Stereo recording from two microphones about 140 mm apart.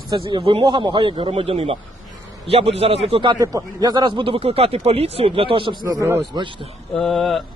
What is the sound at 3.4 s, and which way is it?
Speech, 25° right (ahead or behind).